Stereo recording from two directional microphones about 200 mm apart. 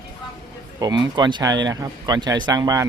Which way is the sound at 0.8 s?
20° right (ahead or behind).